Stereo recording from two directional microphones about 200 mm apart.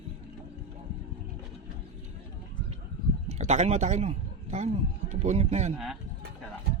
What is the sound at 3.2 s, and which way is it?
Speech, 35° right (ahead or behind).